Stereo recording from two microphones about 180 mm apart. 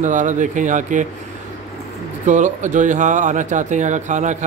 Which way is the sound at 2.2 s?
40° right (ahead or behind).